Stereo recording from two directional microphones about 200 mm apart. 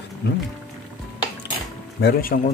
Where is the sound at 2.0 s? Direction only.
50° left (ahead or behind).